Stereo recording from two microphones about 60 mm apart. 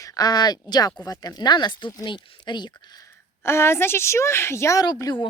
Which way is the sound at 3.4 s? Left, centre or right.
Left.